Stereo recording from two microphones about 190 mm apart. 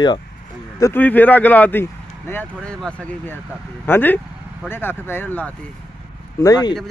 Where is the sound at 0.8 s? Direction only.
10° left (ahead or behind).